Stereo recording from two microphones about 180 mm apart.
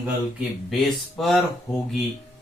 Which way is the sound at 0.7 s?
Centre (ahead or behind).